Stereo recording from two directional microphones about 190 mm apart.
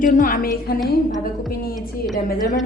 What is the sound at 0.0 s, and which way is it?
Speech, 45° left (ahead or behind).